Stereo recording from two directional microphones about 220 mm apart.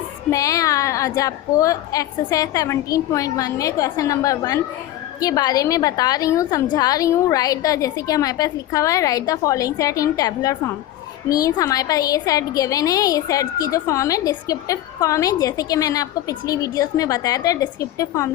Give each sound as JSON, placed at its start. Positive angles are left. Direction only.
{"t": 0.3, "sound": "a woman's voice", "side_deg": 15}